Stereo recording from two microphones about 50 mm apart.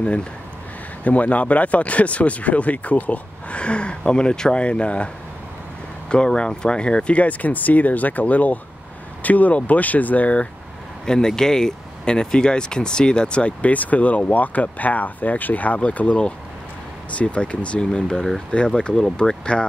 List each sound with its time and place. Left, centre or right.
0.0 s speech: left
11.1 s speech: centre